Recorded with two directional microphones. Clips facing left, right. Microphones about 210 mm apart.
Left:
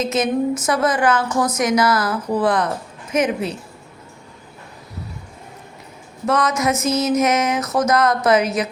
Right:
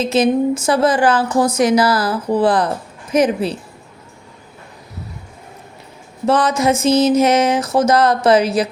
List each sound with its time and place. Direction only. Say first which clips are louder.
0.0 s speech: right 4 dB; 30° right (ahead or behind)
6.2 s speech: right 4 dB; 30° right (ahead or behind)